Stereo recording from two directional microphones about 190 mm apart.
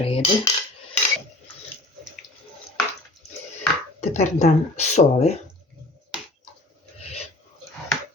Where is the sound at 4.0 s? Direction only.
35° left (ahead or behind).